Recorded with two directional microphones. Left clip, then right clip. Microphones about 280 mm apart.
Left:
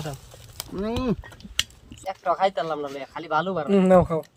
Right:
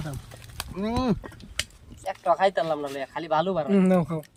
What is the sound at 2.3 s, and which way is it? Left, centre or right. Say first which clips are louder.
Speech: right 1 dB; right.